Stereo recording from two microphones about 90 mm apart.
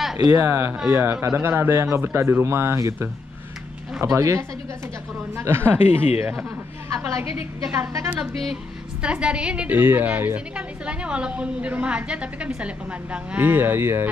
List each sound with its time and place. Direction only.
0.3 s speech: 25° right (ahead or behind)
2.0 s speech: 25° right (ahead or behind)
8.1 s a woman's voice: 15° right (ahead or behind)